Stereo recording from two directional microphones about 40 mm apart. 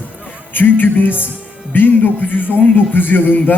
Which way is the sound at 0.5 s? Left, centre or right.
Left.